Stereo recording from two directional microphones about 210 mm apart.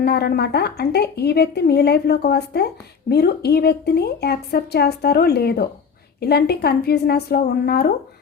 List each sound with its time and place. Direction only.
0.0 s a woman's voice: 50° left (ahead or behind)